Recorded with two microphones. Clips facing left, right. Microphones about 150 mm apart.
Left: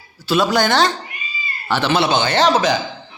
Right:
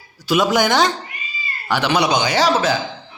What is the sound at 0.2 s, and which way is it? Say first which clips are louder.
A man's voice: even; 15° right (ahead or behind).